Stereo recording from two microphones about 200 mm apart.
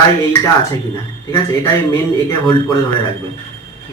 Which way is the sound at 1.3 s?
15° left (ahead or behind).